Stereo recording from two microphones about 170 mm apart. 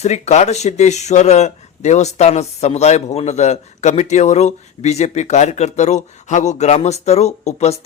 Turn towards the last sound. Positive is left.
turn(degrees=40)  # may be behind; listen again after turning